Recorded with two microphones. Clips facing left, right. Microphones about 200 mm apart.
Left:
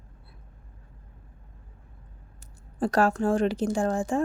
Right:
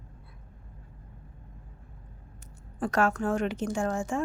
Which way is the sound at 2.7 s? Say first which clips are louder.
Left 3 dB; 30° left (ahead or behind).